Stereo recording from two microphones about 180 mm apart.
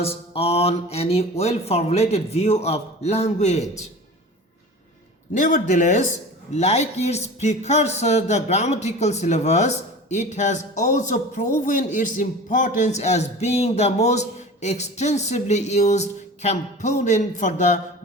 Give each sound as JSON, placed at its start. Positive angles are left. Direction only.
{"t": 0.0, "sound": "a man's voice", "side_deg": 35}
{"t": 5.3, "sound": "a man's voice", "side_deg": 45}